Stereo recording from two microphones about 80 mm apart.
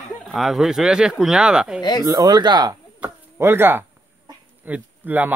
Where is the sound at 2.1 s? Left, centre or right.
Right.